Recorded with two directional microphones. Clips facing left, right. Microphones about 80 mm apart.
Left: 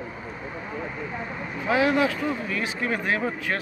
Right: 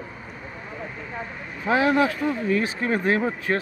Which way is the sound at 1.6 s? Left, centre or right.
Right.